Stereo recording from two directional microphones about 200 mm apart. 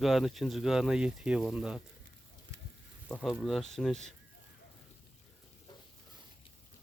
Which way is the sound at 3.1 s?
5° right (ahead or behind).